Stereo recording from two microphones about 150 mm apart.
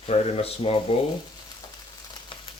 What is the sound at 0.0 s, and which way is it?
Speech, 40° left (ahead or behind).